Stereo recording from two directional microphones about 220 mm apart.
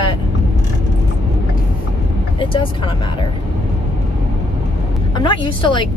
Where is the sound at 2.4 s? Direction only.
25° left (ahead or behind).